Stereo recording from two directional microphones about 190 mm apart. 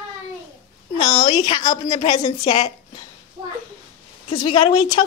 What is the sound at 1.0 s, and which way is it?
A woman's voice, 25° left (ahead or behind).